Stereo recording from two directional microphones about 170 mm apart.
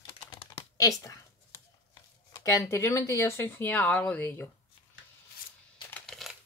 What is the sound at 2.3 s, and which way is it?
Speech, 15° left (ahead or behind).